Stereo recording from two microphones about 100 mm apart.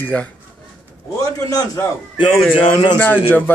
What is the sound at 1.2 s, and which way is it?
Speech, 35° left (ahead or behind).